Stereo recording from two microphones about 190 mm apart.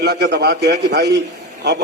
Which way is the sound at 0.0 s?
60° right (ahead or behind).